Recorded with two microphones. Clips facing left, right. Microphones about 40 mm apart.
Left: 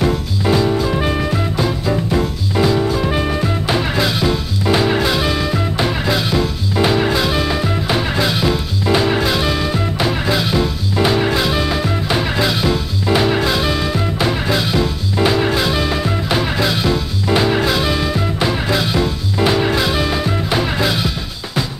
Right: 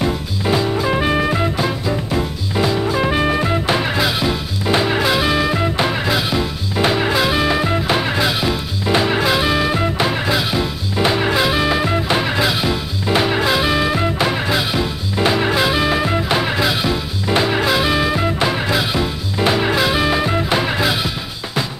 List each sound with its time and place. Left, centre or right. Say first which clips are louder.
0.8 s music: right 1 dB; right
2.9 s music: right 1 dB; centre
3.6 s music: even; centre